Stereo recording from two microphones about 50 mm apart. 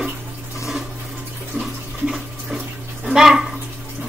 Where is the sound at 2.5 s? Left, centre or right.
Centre.